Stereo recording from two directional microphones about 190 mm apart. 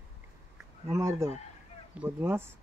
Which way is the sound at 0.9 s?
15° right (ahead or behind).